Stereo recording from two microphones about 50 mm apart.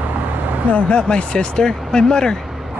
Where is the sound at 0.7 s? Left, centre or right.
Left.